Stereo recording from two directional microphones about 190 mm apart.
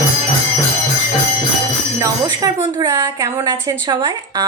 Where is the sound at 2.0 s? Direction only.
20° right (ahead or behind).